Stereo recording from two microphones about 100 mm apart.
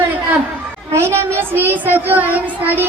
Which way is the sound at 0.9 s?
25° right (ahead or behind).